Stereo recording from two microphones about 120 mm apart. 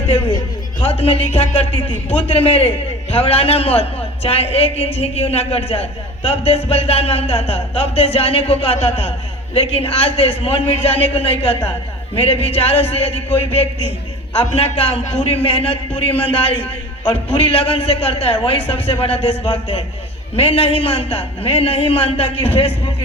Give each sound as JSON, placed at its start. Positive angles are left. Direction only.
{"t": 0.1, "sound": "a man's voice", "side_deg": 50}